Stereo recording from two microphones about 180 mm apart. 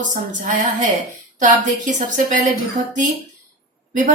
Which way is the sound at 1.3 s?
45° right (ahead or behind).